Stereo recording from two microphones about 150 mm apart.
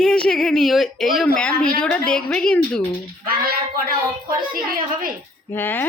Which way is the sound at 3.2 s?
80° right.